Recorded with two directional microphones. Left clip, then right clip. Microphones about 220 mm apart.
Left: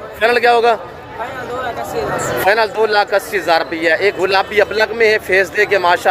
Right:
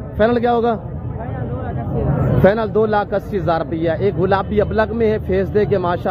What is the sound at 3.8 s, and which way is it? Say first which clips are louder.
Speech: left 4 dB; 50° right (ahead or behind).